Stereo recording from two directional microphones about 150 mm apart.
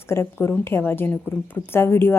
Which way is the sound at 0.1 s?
15° left (ahead or behind).